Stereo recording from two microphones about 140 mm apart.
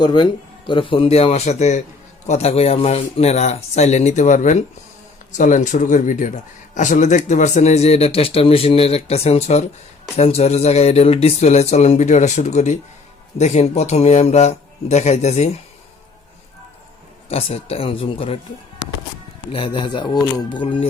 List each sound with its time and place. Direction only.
0.0 s speech: 30° left (ahead or behind); by 15.4 s 55° left (ahead or behind)
17.2 s speech: 45° left (ahead or behind)
19.5 s speech: 35° left (ahead or behind)